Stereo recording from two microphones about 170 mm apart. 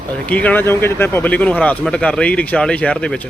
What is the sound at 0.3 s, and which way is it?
Speech, 10° left (ahead or behind).